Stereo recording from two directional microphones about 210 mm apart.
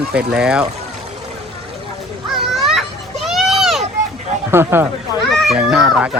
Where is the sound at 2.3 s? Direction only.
Centre (ahead or behind).